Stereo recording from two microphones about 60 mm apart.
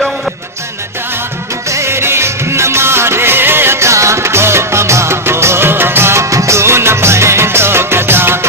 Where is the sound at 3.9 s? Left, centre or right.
Right.